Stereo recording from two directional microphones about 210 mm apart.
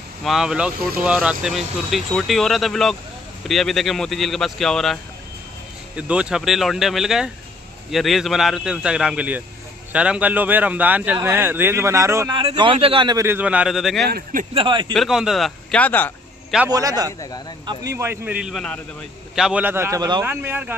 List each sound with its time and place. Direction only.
0.2 s speech: centre (ahead or behind)
5.9 s a man's voice: 5° right (ahead or behind)
12.4 s a man's voice: 25° right (ahead or behind); by 14.0 s centre (ahead or behind)
14.0 s speech: 45° right (ahead or behind)
14.5 s speech: 25° right (ahead or behind)
15.0 s a man's voice: centre (ahead or behind)
16.7 s a man's voice: 15° right (ahead or behind)